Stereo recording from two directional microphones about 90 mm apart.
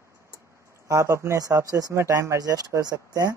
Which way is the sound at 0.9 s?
35° right (ahead or behind).